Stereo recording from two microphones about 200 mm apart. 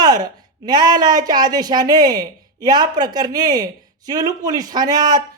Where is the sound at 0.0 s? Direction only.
20° right (ahead or behind).